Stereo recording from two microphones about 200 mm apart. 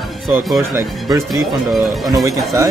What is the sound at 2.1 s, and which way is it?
Speech, 15° right (ahead or behind).